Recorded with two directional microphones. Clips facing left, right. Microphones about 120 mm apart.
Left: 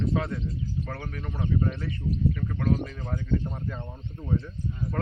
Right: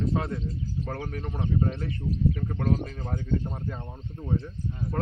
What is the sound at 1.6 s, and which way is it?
Speech, 25° right (ahead or behind).